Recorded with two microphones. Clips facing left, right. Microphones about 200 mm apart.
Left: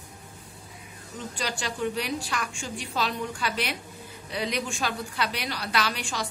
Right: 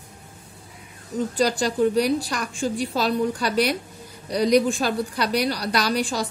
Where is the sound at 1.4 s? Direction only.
40° right (ahead or behind).